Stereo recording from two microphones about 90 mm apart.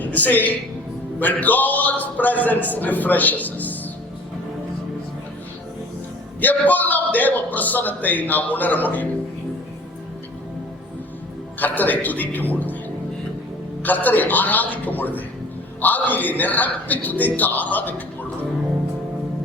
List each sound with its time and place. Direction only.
0.0 s a man's voice: 20° left (ahead or behind)
6.4 s a man's voice: 20° left (ahead or behind)
11.6 s a man's voice: 20° left (ahead or behind)
13.8 s a man's voice: 20° left (ahead or behind)